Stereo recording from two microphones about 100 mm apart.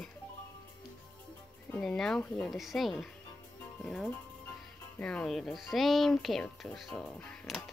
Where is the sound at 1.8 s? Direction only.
5° left (ahead or behind).